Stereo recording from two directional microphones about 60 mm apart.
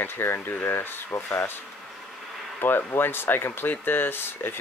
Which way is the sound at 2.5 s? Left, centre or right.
Left.